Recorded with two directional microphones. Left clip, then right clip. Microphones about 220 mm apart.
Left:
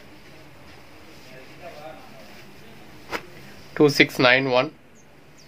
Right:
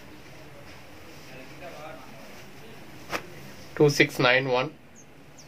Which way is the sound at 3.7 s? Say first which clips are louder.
Left 3 dB; 45° left (ahead or behind).